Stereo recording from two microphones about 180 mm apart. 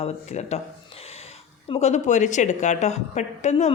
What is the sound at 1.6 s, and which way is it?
Speech, 35° left (ahead or behind).